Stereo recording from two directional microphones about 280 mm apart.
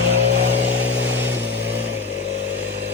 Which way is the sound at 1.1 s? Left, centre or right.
Centre.